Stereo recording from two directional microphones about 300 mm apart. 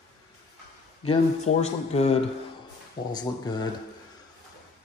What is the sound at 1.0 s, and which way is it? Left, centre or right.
Speech, centre.